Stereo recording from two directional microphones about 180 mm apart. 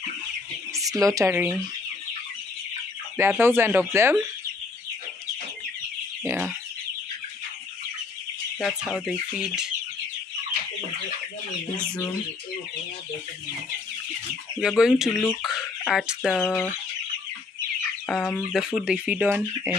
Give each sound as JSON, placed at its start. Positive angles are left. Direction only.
{"t": 0.7, "sound": "speech", "side_deg": -20}
{"t": 3.2, "sound": "speech", "side_deg": -10}
{"t": 8.5, "sound": "speech", "side_deg": 0}
{"t": 14.6, "sound": "speech", "side_deg": -5}
{"t": 18.0, "sound": "speech", "side_deg": 5}